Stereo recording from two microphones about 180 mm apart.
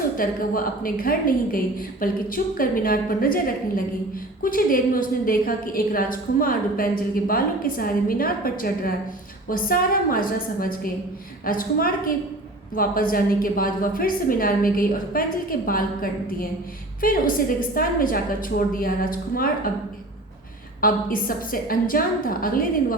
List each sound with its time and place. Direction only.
0.2 s a woman's voice: 50° left (ahead or behind)
20.8 s a woman's voice: 50° left (ahead or behind)